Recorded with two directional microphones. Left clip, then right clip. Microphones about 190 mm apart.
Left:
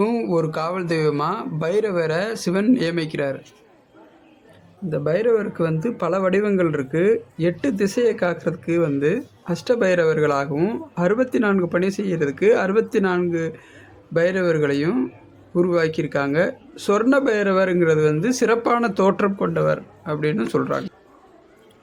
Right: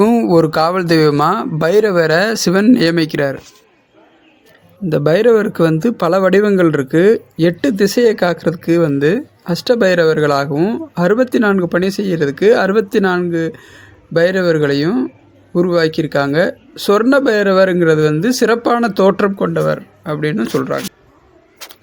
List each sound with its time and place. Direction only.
0.0 s speech: 35° right (ahead or behind)
4.9 s speech: 40° right (ahead or behind); by 20.9 s 20° right (ahead or behind)